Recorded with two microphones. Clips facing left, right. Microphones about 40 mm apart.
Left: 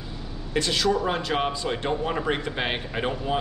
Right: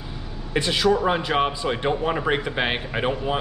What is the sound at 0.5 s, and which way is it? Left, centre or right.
A man's voice, centre.